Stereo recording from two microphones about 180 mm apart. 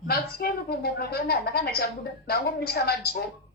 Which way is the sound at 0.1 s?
60° left (ahead or behind).